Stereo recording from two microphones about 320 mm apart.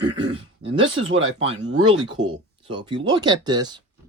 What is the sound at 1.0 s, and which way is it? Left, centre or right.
Speech, right.